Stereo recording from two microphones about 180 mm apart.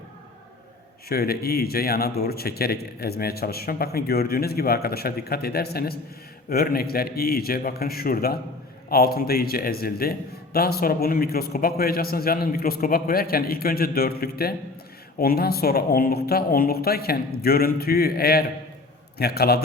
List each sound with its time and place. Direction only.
1.0 s a man's voice: 60° left (ahead or behind)